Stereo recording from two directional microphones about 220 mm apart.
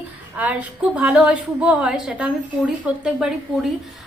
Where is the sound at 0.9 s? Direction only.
5° right (ahead or behind).